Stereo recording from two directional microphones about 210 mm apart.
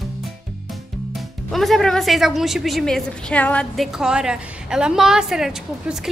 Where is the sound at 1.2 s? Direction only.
Centre (ahead or behind).